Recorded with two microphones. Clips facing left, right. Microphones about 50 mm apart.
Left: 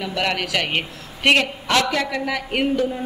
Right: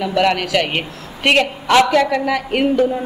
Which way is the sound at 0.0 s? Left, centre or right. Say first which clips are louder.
Right 7 dB; centre.